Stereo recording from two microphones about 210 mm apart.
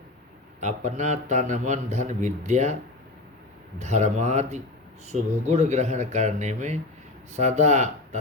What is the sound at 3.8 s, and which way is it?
A man's voice, 35° right (ahead or behind).